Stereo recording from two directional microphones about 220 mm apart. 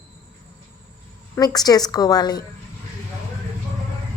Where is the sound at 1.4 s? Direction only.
15° left (ahead or behind).